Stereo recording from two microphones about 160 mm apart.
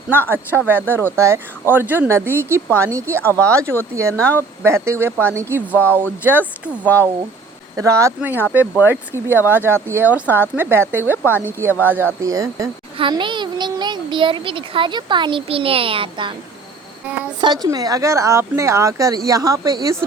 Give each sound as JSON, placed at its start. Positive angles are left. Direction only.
{"t": 0.1, "sound": "speech", "side_deg": -15}
{"t": 4.2, "sound": "speech", "side_deg": 10}
{"t": 4.6, "sound": "speech", "side_deg": -15}
{"t": 5.7, "sound": "speech", "side_deg": 10}
{"t": 6.0, "sound": "speech", "side_deg": -10}
{"t": 7.8, "sound": "a woman's voice", "side_deg": -20}
{"t": 17.4, "sound": "speech", "side_deg": -25}